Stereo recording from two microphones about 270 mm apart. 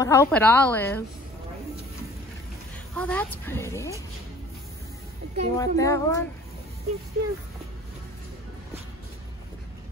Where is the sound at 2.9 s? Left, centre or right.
Centre.